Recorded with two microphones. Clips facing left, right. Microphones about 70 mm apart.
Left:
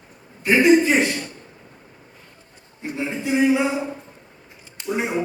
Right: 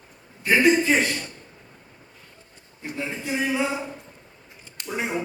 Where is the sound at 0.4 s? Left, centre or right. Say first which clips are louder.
Left 4 dB; left.